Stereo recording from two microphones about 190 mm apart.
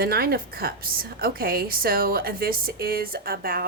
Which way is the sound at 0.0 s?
55° right (ahead or behind).